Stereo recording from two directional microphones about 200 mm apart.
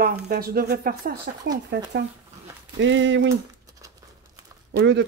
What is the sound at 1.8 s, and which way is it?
Speech, 65° right (ahead or behind).